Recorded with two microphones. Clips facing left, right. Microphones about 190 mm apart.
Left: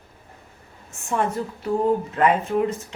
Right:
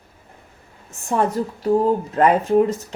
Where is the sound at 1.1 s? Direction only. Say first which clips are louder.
Right 4 dB; 35° right (ahead or behind).